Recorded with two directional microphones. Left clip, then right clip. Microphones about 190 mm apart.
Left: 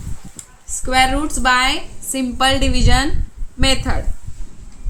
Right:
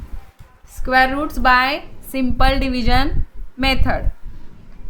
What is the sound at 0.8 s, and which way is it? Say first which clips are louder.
A woman's voice: even; 50° right (ahead or behind).